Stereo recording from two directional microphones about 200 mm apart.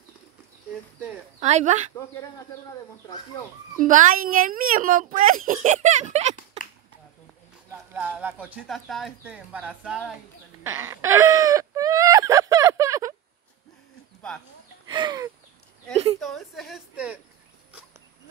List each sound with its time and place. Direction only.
1.4 s speech: 35° right (ahead or behind)
3.8 s speech: 40° right (ahead or behind)
7.9 s speech: 10° right (ahead or behind)
10.6 s whimper: 10° right (ahead or behind)
14.9 s chicken: 20° right (ahead or behind)
16.2 s a woman's voice: centre (ahead or behind)